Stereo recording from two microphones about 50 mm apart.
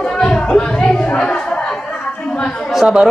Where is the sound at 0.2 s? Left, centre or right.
Centre.